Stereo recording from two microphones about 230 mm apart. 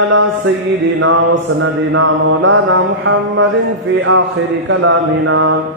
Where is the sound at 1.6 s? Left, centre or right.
Right.